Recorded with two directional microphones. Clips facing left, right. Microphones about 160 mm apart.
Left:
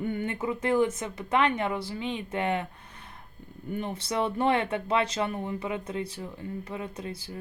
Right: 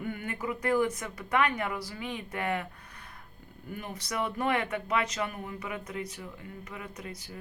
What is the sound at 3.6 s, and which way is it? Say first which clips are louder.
Speech: left 6 dB; 25° left (ahead or behind).